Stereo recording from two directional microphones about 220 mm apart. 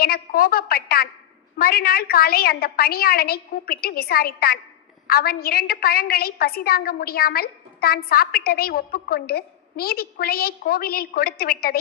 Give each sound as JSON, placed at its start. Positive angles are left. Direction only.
{"t": 0.0, "sound": "a woman's voice", "side_deg": 40}